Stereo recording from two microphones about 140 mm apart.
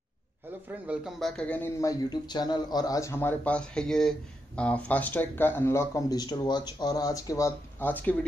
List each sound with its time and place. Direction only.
0.7 s a man's voice: 10° right (ahead or behind)
1.2 s speech: 5° left (ahead or behind)
1.8 s speech: 30° left (ahead or behind); by 8.3 s 10° left (ahead or behind)